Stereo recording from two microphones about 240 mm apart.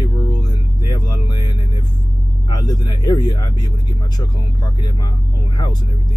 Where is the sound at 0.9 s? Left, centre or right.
Centre.